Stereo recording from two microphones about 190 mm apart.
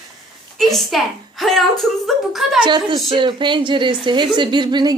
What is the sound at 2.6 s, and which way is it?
A woman's voice, 25° right (ahead or behind).